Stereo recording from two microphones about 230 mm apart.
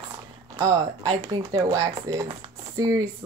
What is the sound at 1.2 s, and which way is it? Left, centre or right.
Speech, centre.